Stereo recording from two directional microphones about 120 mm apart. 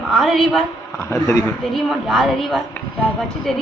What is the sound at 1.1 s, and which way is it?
Speech, 25° left (ahead or behind).